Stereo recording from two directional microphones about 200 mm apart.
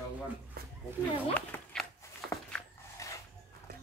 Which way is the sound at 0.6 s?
50° right (ahead or behind).